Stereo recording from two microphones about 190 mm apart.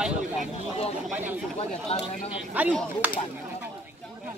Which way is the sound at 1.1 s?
10° right (ahead or behind).